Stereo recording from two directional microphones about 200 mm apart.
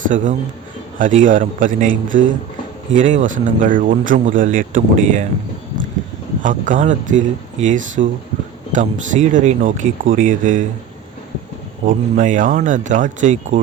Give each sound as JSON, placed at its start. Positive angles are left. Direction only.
{"t": 0.1, "sound": "speech", "side_deg": -35}
{"t": 6.4, "sound": "speech", "side_deg": -40}
{"t": 11.9, "sound": "speech", "side_deg": -40}